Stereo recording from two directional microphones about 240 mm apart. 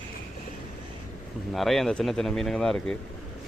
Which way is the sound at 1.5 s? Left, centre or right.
Centre.